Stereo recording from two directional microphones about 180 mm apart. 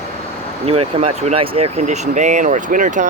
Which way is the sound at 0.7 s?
35° right (ahead or behind).